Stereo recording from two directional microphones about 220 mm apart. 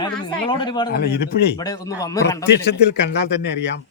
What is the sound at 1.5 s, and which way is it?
Speech, 15° left (ahead or behind).